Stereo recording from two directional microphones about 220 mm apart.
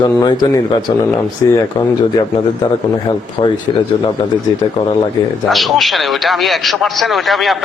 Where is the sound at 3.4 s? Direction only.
20° left (ahead or behind).